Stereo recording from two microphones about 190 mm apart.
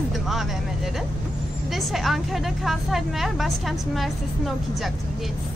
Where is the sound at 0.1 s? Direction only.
Centre (ahead or behind).